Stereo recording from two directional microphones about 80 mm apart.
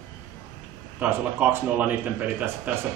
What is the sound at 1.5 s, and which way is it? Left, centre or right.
A man's voice, right.